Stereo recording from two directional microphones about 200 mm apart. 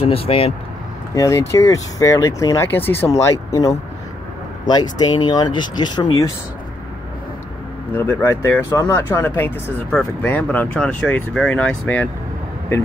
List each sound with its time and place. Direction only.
0.0 s speech: 30° left (ahead or behind)
1.1 s speech: 15° left (ahead or behind)
7.9 s speech: 10° left (ahead or behind)